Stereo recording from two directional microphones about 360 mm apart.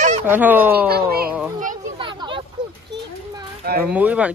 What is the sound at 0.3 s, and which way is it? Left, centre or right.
Speech, centre.